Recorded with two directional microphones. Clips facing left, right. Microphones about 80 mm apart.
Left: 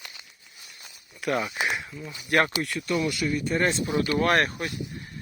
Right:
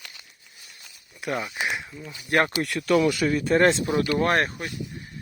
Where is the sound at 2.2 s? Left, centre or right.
Right.